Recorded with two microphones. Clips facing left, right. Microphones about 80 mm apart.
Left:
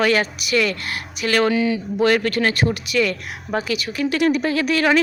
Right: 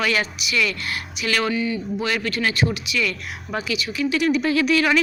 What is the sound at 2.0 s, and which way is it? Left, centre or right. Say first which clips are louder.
Speech: left 9 dB; left.